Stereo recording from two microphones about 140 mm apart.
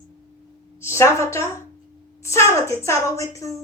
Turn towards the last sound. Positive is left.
turn(degrees=20)  # may be behind; listen again after turning